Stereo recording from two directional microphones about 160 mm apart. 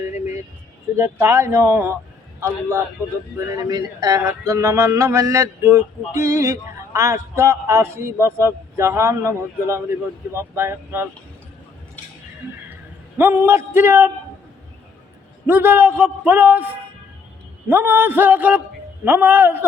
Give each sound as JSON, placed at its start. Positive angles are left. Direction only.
{"t": 0.9, "sound": "speech", "side_deg": -15}
{"t": 13.1, "sound": "speech", "side_deg": -15}
{"t": 15.4, "sound": "speech", "side_deg": -15}
{"t": 17.7, "sound": "speech", "side_deg": -15}